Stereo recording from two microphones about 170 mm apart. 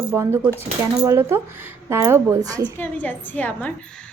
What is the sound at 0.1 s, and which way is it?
A woman's voice, 15° right (ahead or behind).